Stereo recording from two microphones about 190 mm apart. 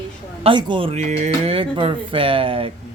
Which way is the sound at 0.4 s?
25° right (ahead or behind).